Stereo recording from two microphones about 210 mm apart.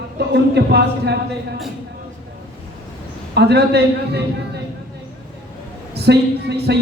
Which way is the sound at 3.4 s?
50° right (ahead or behind).